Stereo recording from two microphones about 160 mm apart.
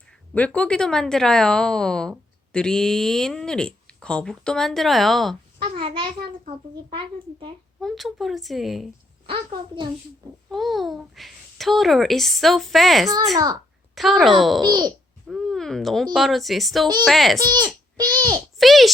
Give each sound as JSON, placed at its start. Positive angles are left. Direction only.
{"t": 0.3, "sound": "speech", "side_deg": 10}
{"t": 5.5, "sound": "a sound", "side_deg": -35}
{"t": 6.9, "sound": "a child's voice", "side_deg": -30}
{"t": 7.8, "sound": "speech", "side_deg": 0}
{"t": 9.2, "sound": "a child's voice", "side_deg": -30}
{"t": 10.5, "sound": "speech", "side_deg": 0}
{"t": 13.3, "sound": "a child's voice", "side_deg": -25}
{"t": 13.9, "sound": "speech", "side_deg": 0}
{"t": 14.6, "sound": "a child's voice", "side_deg": -25}
{"t": 15.3, "sound": "speech", "side_deg": 0}
{"t": 17.3, "sound": "a child's voice", "side_deg": -25}
{"t": 18.3, "sound": "a child's voice", "side_deg": 0}